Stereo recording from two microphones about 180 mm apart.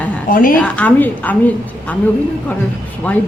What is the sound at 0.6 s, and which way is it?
Speech, 5° left (ahead or behind).